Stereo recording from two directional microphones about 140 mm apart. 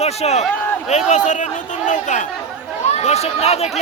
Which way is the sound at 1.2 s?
60° left (ahead or behind).